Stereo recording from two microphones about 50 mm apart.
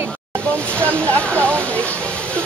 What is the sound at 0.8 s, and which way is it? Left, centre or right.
Speech, left.